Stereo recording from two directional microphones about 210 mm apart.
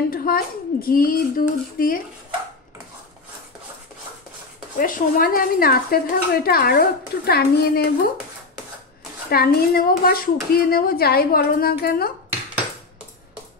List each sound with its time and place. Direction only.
0.1 s speech: 45° left (ahead or behind)
4.7 s speech: 40° left (ahead or behind)
9.3 s speech: 45° left (ahead or behind)